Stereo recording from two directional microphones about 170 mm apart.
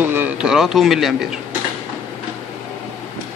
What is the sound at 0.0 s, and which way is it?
A man's voice, 10° right (ahead or behind).